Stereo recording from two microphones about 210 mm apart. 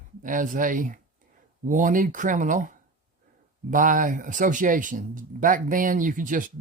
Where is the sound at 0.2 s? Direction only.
40° right (ahead or behind).